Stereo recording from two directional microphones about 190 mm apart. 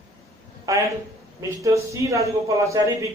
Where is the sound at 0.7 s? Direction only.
15° right (ahead or behind).